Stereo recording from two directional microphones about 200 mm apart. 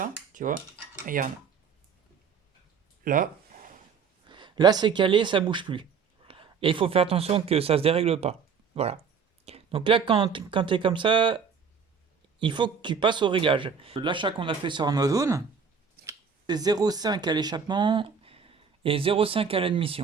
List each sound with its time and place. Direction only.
0.0 s cutlery: 40° right (ahead or behind)
1.0 s speech: 45° right (ahead or behind)
3.0 s speech: 45° right (ahead or behind)
4.3 s a man's voice: 25° right (ahead or behind)